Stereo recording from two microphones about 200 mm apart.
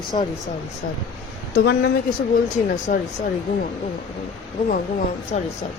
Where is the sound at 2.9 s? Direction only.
40° left (ahead or behind).